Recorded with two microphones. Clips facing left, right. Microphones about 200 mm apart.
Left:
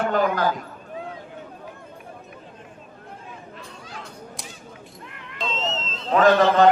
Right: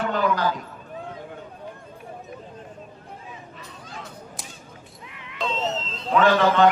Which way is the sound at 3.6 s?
Centre (ahead or behind).